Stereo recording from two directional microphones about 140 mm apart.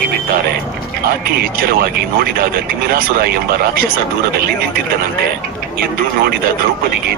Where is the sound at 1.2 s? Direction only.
90° right.